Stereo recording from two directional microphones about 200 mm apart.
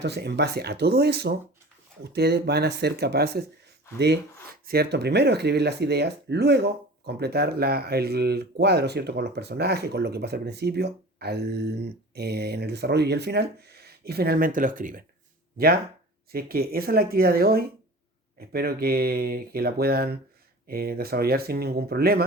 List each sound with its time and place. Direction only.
0.0 s speech: 55° right (ahead or behind)